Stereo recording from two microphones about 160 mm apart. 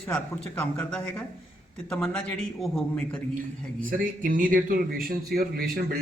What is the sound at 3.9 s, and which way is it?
A man's voice, 60° right (ahead or behind).